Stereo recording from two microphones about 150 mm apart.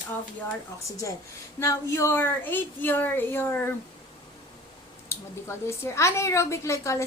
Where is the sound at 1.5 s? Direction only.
20° left (ahead or behind).